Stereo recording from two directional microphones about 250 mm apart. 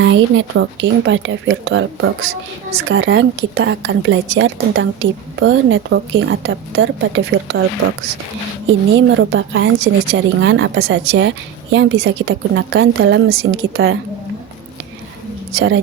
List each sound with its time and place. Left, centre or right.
0.0 s a woman's voice: right
8.6 s a woman's voice: right